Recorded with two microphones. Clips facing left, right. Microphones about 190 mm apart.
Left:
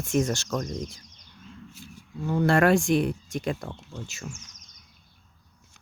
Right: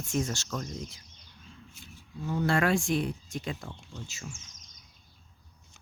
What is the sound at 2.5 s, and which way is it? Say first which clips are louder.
Speech: left 6 dB; 60° left (ahead or behind).